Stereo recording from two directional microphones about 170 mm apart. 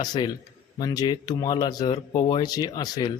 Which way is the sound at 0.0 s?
25° left (ahead or behind).